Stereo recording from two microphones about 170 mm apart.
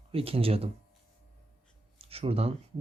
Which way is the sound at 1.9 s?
35° right (ahead or behind).